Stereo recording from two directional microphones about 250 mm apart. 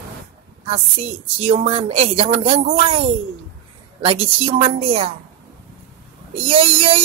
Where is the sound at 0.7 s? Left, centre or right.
Right.